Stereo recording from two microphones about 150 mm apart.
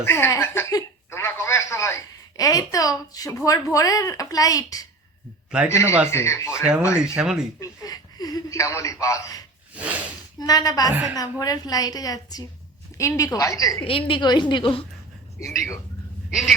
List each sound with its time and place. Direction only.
0.0 s speech: 15° left (ahead or behind)
7.2 s a sound: 5° right (ahead or behind)
7.6 s speech: 25° left (ahead or behind)
9.7 s speech: 10° right (ahead or behind)
10.4 s speech: 25° left (ahead or behind)
13.8 s a woman's voice: 35° left (ahead or behind)
16.3 s a sound: centre (ahead or behind)